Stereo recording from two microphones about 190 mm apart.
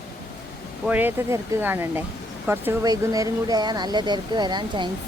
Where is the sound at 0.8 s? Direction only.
10° right (ahead or behind).